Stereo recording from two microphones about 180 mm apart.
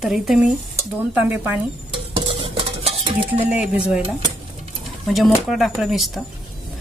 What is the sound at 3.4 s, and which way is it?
Speech, 5° right (ahead or behind).